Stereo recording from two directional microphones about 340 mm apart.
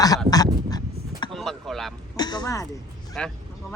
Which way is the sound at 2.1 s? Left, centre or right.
Centre.